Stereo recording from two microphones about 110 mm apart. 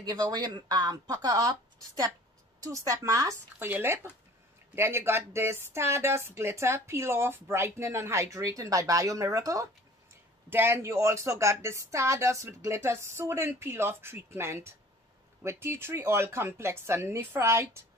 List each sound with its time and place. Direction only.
0.0 s speech: 40° right (ahead or behind)
3.5 s speech: 20° right (ahead or behind)